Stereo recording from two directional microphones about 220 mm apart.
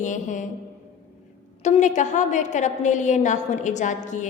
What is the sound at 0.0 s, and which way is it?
Speech, 35° left (ahead or behind).